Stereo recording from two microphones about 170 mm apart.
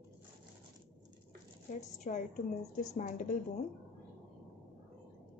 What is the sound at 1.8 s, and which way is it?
A woman's voice, 45° left (ahead or behind).